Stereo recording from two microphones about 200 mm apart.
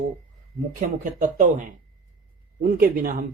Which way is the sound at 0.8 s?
40° right (ahead or behind).